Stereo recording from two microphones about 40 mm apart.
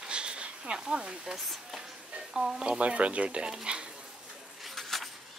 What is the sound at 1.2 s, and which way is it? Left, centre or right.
Speech, centre.